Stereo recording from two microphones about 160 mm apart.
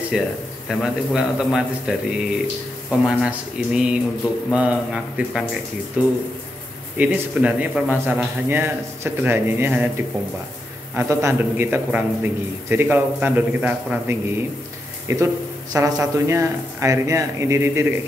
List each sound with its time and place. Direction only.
0.1 s a man's voice: 5° right (ahead or behind)